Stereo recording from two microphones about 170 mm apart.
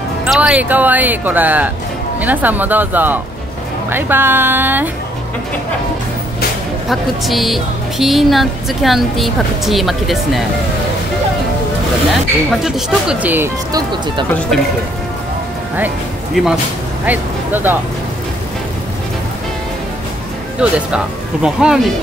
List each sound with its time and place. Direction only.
0.3 s speech: 5° right (ahead or behind)
6.9 s speech: centre (ahead or behind)
12.4 s speech: 5° right (ahead or behind)
13.7 s speech: 25° right (ahead or behind)
14.5 s speech: centre (ahead or behind)
16.4 s speech: centre (ahead or behind)
20.6 s speech: 5° right (ahead or behind)